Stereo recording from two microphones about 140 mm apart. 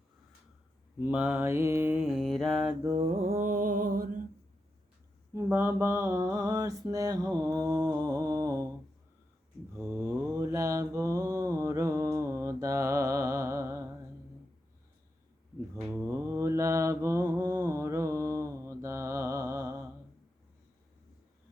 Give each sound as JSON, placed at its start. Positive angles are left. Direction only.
{"t": 0.9, "sound": "mantra", "side_deg": -15}
{"t": 2.9, "sound": "mantra", "side_deg": -45}
{"t": 5.3, "sound": "mantra", "side_deg": -20}
{"t": 9.7, "sound": "mantra", "side_deg": -20}
{"t": 15.8, "sound": "mantra", "side_deg": -5}
{"t": 16.0, "sound": "mantra", "side_deg": -20}